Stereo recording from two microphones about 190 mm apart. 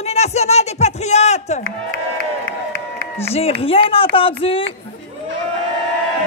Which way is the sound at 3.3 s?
30° left (ahead or behind).